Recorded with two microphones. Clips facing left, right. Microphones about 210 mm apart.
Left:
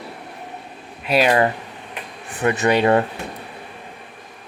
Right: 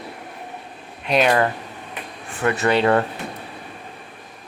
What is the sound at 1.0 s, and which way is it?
Speech, 5° left (ahead or behind).